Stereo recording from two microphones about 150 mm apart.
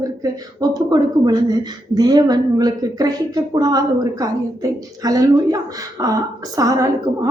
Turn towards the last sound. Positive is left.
turn(degrees=-25)  # may be behind; listen again after turning